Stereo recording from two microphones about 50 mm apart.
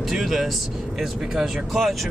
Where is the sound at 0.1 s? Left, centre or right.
Centre.